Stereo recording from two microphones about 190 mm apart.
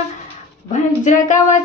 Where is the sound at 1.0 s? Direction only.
40° left (ahead or behind).